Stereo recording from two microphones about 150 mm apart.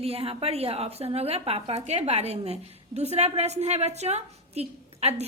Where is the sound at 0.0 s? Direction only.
40° right (ahead or behind).